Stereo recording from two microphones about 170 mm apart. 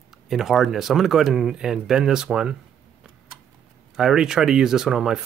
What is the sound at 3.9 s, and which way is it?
Speech, centre (ahead or behind).